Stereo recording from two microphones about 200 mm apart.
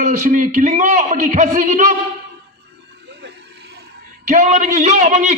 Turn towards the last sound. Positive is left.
turn(degrees=-35)  # may be behind; listen again after turning